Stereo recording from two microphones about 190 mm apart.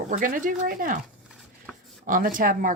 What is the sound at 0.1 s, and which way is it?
Speech, 45° right (ahead or behind).